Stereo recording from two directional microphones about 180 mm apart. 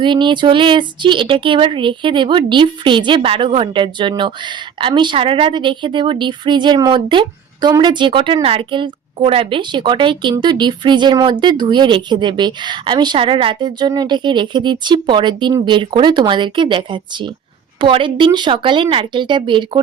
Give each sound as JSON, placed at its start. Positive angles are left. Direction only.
{"t": 0.0, "sound": "speech", "side_deg": -25}